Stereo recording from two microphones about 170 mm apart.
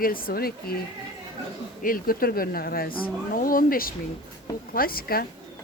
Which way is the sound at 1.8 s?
55° left (ahead or behind).